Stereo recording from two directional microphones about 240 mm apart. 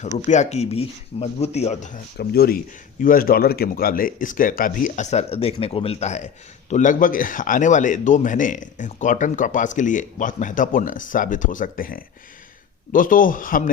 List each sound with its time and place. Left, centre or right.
0.3 s speech: left
2.1 s speech: left